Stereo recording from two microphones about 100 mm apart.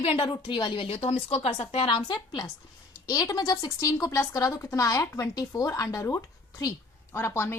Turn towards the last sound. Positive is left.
turn(degrees=25)  # may be behind; listen again after turning